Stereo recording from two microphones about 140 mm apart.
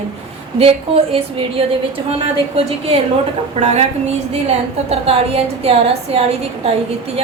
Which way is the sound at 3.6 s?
50° right (ahead or behind).